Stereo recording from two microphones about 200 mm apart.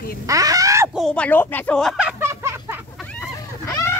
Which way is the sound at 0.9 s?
5° left (ahead or behind).